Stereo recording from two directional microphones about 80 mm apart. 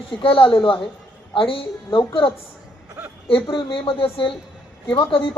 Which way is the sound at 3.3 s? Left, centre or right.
Left.